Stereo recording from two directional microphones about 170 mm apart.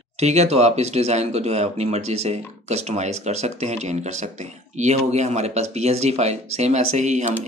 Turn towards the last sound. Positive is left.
turn(degrees=-45)  # may be behind; listen again after turning